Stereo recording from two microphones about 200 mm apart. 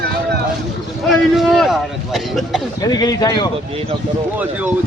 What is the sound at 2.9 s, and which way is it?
Speech, 20° left (ahead or behind).